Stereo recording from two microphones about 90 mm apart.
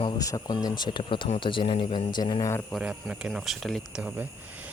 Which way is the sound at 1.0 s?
70° left (ahead or behind).